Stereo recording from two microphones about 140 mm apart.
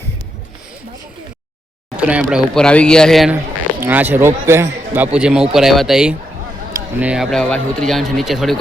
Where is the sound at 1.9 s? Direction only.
10° right (ahead or behind).